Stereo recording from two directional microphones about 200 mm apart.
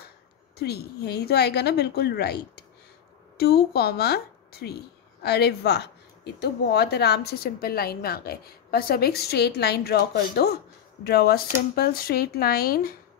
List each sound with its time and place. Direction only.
0.6 s a woman's voice: 55° left (ahead or behind)